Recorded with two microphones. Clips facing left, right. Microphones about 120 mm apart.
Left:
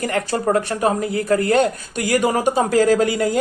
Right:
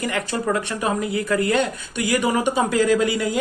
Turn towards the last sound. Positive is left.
turn(degrees=40)  # may be behind; listen again after turning